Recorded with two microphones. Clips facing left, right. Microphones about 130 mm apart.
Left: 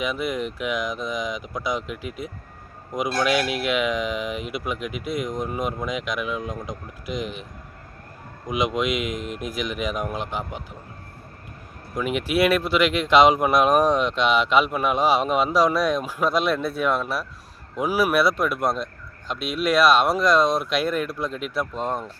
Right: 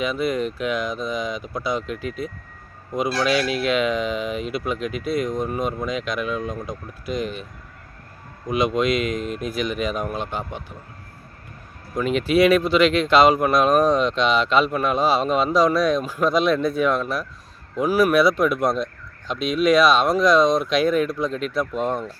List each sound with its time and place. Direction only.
0.0 s speech: 15° left (ahead or behind)
8.4 s speech: 15° left (ahead or behind)
12.0 s speech: 10° left (ahead or behind)